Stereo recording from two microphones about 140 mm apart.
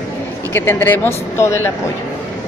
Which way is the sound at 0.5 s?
15° left (ahead or behind).